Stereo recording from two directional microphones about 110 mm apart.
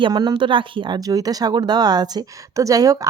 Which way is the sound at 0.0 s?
40° right (ahead or behind).